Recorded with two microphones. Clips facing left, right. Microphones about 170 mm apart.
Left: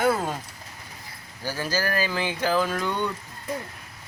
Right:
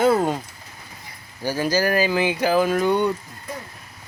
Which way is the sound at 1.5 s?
15° right (ahead or behind).